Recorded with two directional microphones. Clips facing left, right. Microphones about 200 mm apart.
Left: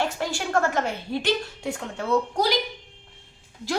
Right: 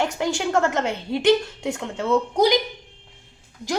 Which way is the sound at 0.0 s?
15° right (ahead or behind).